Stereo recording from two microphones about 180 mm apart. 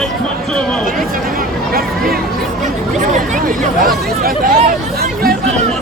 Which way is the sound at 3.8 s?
55° right (ahead or behind).